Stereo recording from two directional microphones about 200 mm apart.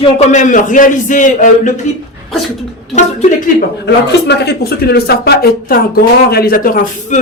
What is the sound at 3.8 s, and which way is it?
Speech, 60° left (ahead or behind).